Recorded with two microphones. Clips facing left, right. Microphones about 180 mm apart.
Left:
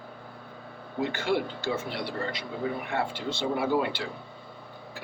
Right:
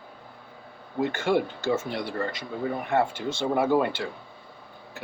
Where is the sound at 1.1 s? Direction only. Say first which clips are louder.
Right 3 dB; 50° right (ahead or behind).